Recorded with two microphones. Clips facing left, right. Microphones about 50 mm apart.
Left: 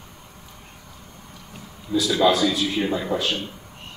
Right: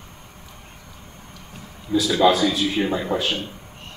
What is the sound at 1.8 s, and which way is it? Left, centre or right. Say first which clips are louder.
Speech: right 2 dB; centre.